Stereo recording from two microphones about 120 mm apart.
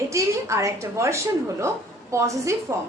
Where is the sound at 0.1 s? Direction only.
25° right (ahead or behind).